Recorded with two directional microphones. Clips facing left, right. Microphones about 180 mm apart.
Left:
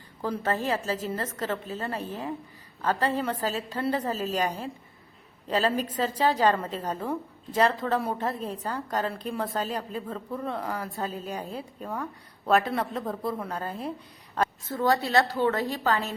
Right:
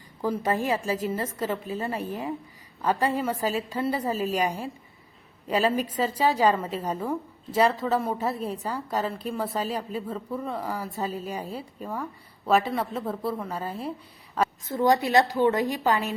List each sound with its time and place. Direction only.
0.2 s a woman's voice: 10° right (ahead or behind)
14.7 s a woman's voice: 20° right (ahead or behind)